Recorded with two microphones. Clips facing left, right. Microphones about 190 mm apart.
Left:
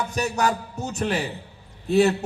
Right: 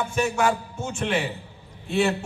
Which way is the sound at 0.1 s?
40° left (ahead or behind).